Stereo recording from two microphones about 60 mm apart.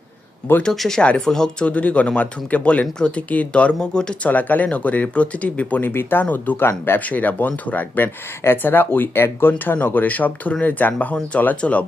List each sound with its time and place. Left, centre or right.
0.6 s speech: centre
1.6 s speech: left
5.8 s speech: left
7.0 s speech: left